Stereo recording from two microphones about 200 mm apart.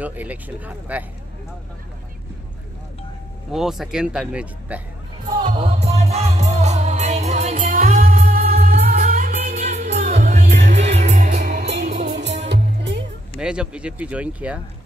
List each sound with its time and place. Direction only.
0.0 s speech: 10° right (ahead or behind)
3.5 s speech: centre (ahead or behind)
5.4 s music: 25° right (ahead or behind)
12.2 s music: 60° right (ahead or behind)
13.4 s speech: 5° right (ahead or behind)